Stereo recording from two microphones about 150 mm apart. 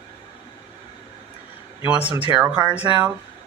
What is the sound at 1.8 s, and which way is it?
Speech, 10° right (ahead or behind).